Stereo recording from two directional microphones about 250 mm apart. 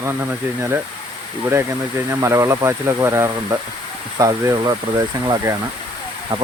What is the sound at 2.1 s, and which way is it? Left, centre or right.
Speech, centre.